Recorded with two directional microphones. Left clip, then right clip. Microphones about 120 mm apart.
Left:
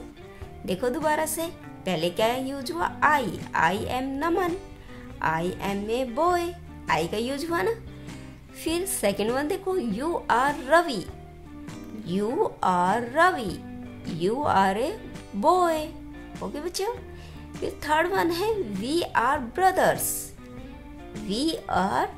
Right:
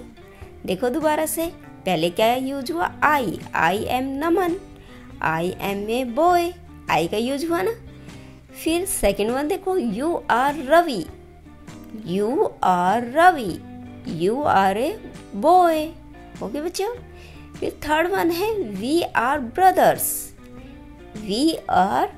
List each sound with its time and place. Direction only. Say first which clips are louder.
0.7 s a woman's voice: right 4 dB; 25° right (ahead or behind)
21.3 s a woman's voice: right 6 dB; 25° right (ahead or behind)